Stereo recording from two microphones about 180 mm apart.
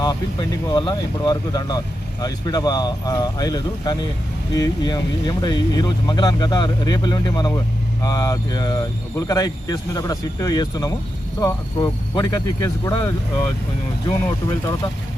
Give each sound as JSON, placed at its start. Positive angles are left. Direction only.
{"t": 0.0, "sound": "speech", "side_deg": 25}